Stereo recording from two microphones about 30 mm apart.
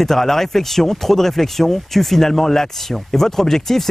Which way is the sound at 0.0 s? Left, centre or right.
Centre.